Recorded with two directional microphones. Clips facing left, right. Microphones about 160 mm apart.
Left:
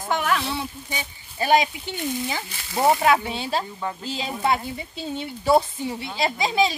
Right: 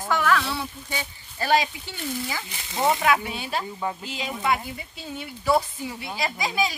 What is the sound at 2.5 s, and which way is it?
Speech, 20° right (ahead or behind).